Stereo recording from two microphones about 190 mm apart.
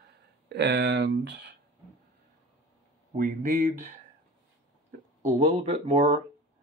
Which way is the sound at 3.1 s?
45° right (ahead or behind).